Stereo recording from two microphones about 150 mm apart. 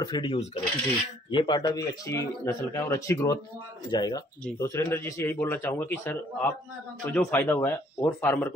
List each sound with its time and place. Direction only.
0.0 s a man's voice: 35° left (ahead or behind); by 8.5 s 15° left (ahead or behind)